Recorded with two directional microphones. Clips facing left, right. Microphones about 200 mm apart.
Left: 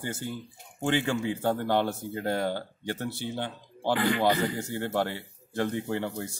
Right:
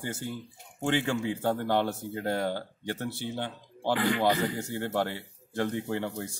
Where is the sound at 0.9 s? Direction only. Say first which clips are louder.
Left 1 dB; 20° left (ahead or behind).